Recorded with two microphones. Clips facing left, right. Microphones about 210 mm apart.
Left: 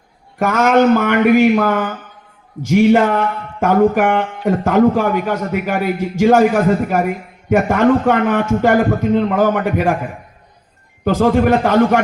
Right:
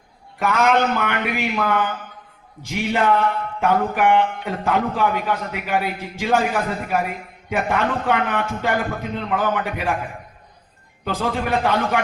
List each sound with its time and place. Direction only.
0.3 s speech: 45° left (ahead or behind)
11.0 s speech: 45° left (ahead or behind)